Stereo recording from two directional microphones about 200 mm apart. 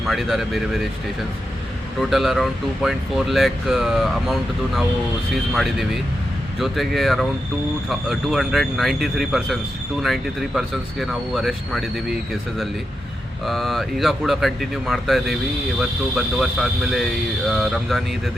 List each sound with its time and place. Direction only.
0.0 s speech: centre (ahead or behind)
2.0 s speech: centre (ahead or behind)
13.4 s speech: centre (ahead or behind)